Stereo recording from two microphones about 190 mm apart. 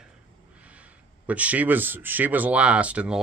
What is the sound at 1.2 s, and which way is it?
Speech, 5° right (ahead or behind).